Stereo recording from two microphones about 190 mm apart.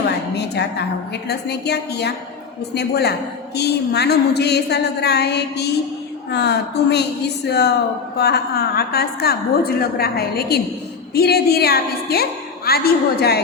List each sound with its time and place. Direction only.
0.3 s a woman's voice: 60° left (ahead or behind)